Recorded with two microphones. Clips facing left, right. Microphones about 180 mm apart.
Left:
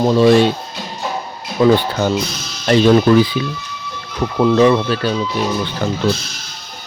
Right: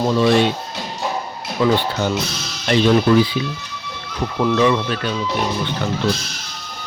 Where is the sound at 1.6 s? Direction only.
40° left (ahead or behind).